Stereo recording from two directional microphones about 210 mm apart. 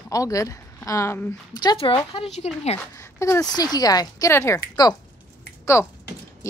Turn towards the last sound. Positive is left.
turn(degrees=15)  # may be behind; listen again after turning